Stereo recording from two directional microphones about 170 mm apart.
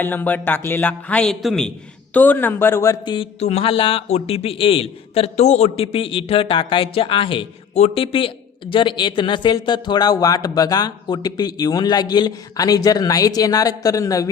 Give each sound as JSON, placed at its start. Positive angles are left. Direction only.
{"t": 0.0, "sound": "a man's voice", "side_deg": 10}